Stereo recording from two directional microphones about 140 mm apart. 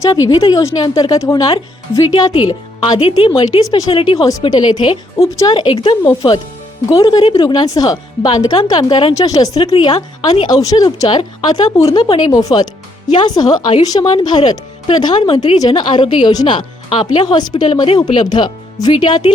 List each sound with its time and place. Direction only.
0.0 s a woman's voice: 25° left (ahead or behind)
2.8 s speech: 35° left (ahead or behind)
3.4 s a woman's voice: 25° left (ahead or behind)
9.7 s speech: 40° left (ahead or behind)
10.5 s a woman's voice: 25° left (ahead or behind)